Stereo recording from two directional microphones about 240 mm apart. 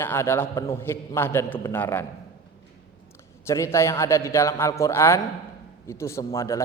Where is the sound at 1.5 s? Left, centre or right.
Left.